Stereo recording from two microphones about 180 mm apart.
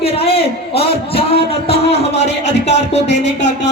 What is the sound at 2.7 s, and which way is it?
Speech, 40° left (ahead or behind).